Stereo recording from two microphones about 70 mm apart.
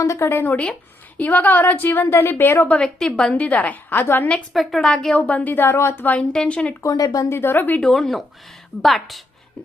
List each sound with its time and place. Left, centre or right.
0.0 s speech: left
0.3 s a woman's voice: left
2.6 s a woman's voice: centre
4.5 s speech: centre
4.9 s a woman's voice: centre; by 6.1 s left
6.3 s speech: centre
6.8 s speech: left
7.3 s a woman's voice: left
7.8 s speech: centre